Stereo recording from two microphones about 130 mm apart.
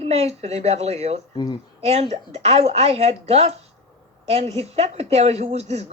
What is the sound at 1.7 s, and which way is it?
A woman's voice, 55° right (ahead or behind).